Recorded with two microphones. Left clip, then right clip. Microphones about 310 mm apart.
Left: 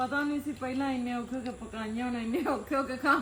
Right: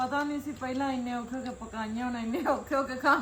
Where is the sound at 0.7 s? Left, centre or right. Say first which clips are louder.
Right 2 dB; centre.